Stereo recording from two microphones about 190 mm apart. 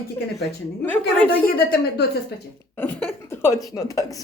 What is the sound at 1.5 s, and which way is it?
Speech, 55° left (ahead or behind).